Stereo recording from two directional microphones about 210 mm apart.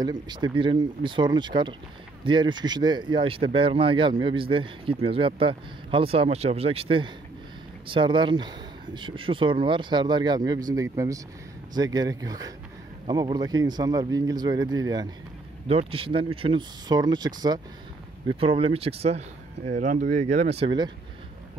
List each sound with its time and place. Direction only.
0.0 s speech: 20° right (ahead or behind)